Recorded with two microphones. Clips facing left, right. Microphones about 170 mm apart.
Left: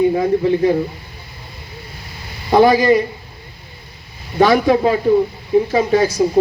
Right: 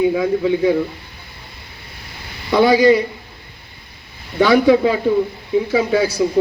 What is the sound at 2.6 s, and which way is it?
Speech, 75° right (ahead or behind).